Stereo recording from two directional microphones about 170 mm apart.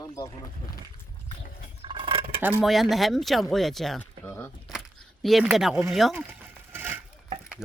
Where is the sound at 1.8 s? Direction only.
30° right (ahead or behind).